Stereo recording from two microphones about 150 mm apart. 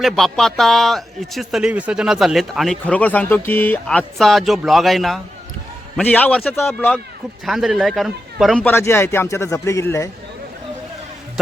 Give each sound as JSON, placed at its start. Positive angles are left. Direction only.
{"t": 0.0, "sound": "a man's voice", "side_deg": 0}
{"t": 7.4, "sound": "a man's voice", "side_deg": 0}
{"t": 8.6, "sound": "a man's voice", "side_deg": 15}